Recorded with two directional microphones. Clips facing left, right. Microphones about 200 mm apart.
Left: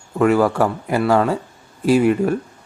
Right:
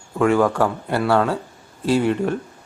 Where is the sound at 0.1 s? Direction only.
5° left (ahead or behind).